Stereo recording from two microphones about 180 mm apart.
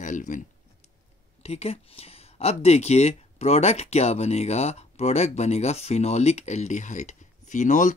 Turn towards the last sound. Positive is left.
turn(degrees=45)  # may be behind; listen again after turning